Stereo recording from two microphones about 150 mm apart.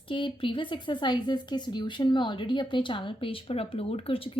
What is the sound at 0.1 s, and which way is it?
Speech, 35° left (ahead or behind).